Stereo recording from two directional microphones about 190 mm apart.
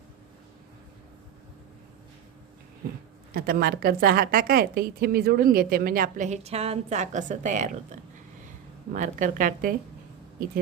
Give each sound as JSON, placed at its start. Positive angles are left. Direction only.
{"t": 3.3, "sound": "a woman's voice", "side_deg": -50}
{"t": 8.9, "sound": "a woman's voice", "side_deg": -40}